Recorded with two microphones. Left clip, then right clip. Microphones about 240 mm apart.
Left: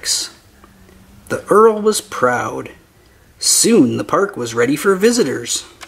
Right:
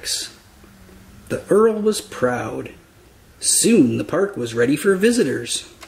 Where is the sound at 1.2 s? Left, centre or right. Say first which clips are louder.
Left 5 dB; centre.